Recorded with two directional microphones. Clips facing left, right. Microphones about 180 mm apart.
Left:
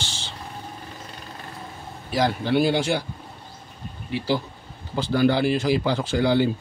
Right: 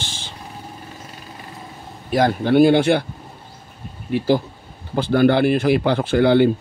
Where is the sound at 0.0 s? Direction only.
55° right (ahead or behind).